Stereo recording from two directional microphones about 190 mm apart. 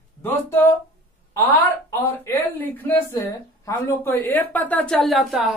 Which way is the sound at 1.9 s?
10° left (ahead or behind).